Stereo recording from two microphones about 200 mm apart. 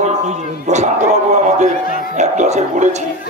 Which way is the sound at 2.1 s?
35° right (ahead or behind).